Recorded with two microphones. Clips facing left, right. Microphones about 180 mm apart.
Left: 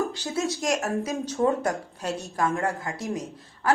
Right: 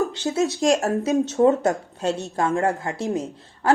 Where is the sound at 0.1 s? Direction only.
25° right (ahead or behind).